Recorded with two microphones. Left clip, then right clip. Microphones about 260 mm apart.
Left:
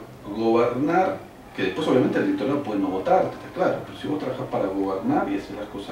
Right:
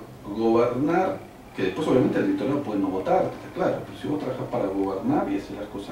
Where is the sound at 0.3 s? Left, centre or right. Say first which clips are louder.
Left 1 dB; left.